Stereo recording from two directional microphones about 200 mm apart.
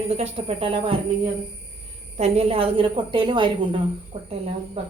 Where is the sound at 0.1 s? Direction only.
30° right (ahead or behind).